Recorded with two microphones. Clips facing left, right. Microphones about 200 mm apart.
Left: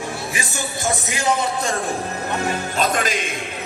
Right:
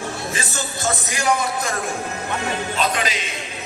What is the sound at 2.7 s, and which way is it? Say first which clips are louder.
Music: left 3 dB; 45° left (ahead or behind).